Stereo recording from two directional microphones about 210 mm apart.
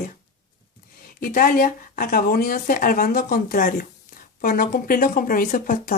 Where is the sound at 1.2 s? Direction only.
45° left (ahead or behind).